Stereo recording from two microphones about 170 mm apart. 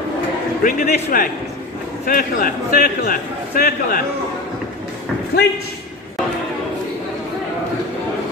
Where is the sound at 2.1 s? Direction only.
55° left (ahead or behind).